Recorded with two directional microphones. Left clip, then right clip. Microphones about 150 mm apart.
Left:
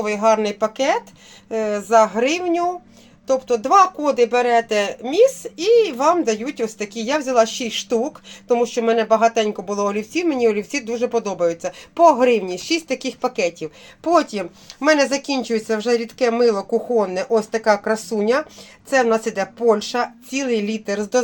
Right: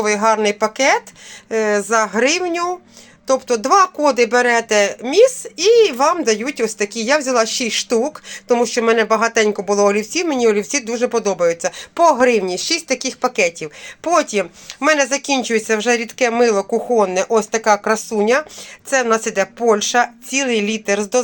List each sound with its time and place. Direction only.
0.0 s speech: 5° right (ahead or behind)
1.5 s speech: 15° right (ahead or behind); by 21.2 s centre (ahead or behind)